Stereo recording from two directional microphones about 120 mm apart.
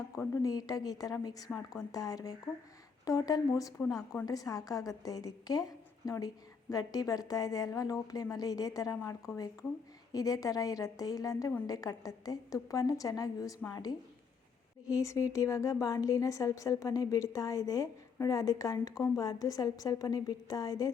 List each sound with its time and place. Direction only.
0.4 s a woman's voice: 30° left (ahead or behind)